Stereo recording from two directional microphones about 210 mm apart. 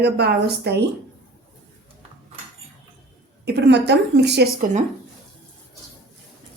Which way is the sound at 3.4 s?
50° right (ahead or behind).